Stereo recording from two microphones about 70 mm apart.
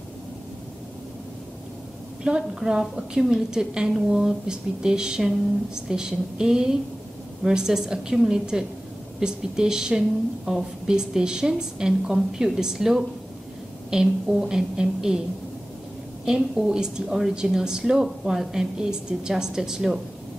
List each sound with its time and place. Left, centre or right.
2.2 s a woman's voice: centre
16.3 s a woman's voice: centre